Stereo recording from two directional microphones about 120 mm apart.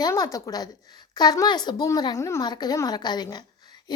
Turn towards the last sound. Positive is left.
turn(degrees=35)  # may be behind; listen again after turning